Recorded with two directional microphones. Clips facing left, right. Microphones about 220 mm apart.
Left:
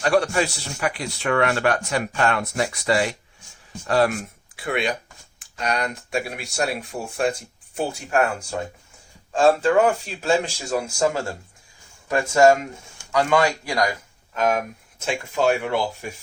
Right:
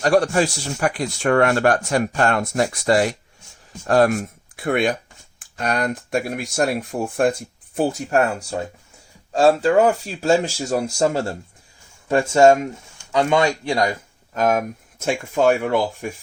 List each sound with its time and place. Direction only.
0.0 s speech: 40° right (ahead or behind); by 13.9 s 25° right (ahead or behind)
14.3 s speech: 45° right (ahead or behind)